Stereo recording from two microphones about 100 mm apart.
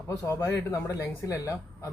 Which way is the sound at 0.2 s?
30° left (ahead or behind).